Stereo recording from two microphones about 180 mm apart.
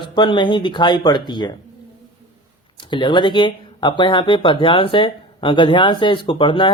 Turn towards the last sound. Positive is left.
turn(degrees=25)  # may be behind; listen again after turning